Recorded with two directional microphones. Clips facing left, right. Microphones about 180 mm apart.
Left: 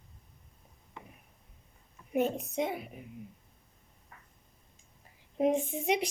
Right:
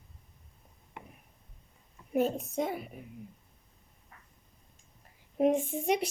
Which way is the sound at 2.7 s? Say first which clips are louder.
Right 1 dB; centre (ahead or behind).